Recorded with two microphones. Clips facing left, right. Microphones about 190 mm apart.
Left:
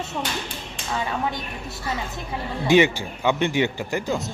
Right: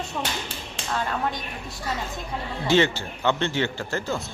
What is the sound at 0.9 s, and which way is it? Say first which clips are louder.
Speech: left 1 dB; 5° left (ahead or behind).